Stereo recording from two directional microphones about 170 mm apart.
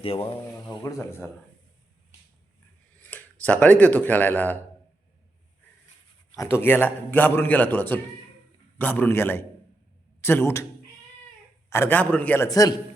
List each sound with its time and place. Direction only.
0.0 s speech: 35° left (ahead or behind)
0.7 s a man's voice: 20° left (ahead or behind)
3.0 s speech: 10° left (ahead or behind)
6.3 s a man's voice: 15° left (ahead or behind)
11.7 s a man's voice: 15° left (ahead or behind)